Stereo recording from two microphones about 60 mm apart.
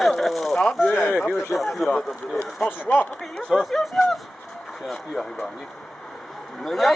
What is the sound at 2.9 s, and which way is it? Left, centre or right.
Speech, left.